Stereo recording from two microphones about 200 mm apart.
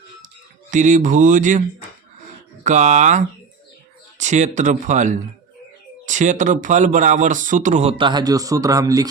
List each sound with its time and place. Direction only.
0.7 s speech: 40° right (ahead or behind)
2.6 s speech: 35° right (ahead or behind); by 9.0 s 15° right (ahead or behind)